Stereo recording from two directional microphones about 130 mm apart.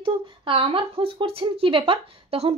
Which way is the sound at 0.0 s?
45° right (ahead or behind).